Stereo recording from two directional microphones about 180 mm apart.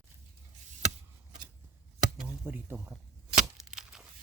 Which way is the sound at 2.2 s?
10° right (ahead or behind).